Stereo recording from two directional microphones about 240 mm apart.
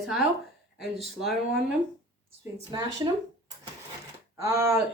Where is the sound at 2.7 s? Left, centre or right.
Centre.